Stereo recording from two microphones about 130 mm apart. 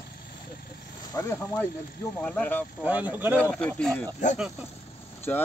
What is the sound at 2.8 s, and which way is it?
Speech, 10° right (ahead or behind).